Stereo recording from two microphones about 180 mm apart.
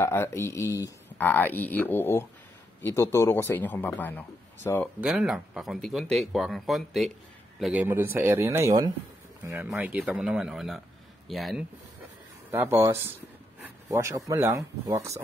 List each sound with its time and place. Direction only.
0.0 s speech: 15° left (ahead or behind)
5.0 s speech: 5° right (ahead or behind)
9.5 s speech: 5° right (ahead or behind)
12.4 s speech: 15° right (ahead or behind)